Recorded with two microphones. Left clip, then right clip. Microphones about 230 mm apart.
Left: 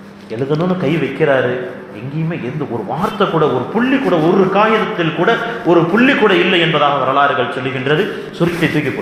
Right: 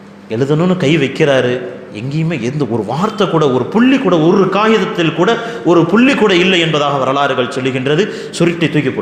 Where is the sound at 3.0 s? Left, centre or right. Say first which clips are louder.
Right 1 dB; right.